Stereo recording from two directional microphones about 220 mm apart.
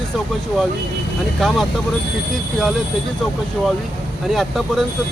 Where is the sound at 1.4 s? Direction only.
Centre (ahead or behind).